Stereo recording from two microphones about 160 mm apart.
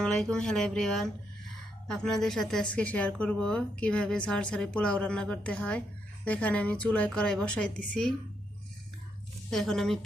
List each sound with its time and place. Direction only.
0.0 s a woman's voice: 5° left (ahead or behind)
9.5 s speech: centre (ahead or behind)